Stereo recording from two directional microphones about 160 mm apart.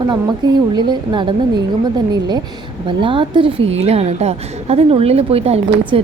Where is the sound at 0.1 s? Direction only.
30° right (ahead or behind).